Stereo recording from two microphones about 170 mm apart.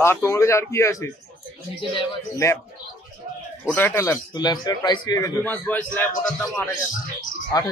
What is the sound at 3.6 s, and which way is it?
A man's voice, 10° left (ahead or behind).